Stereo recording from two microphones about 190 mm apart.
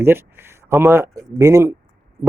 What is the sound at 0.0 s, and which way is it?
Speech, 10° right (ahead or behind).